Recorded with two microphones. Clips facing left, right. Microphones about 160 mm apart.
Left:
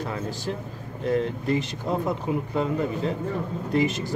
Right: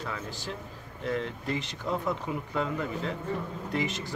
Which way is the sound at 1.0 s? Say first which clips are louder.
Left 7 dB; 40° left (ahead or behind).